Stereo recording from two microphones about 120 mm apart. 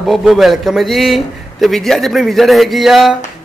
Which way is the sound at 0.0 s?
Centre (ahead or behind).